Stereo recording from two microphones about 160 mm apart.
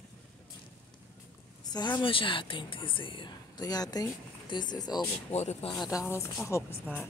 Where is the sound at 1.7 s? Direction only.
25° left (ahead or behind).